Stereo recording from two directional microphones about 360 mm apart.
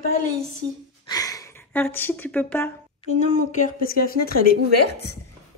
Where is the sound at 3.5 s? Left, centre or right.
Left.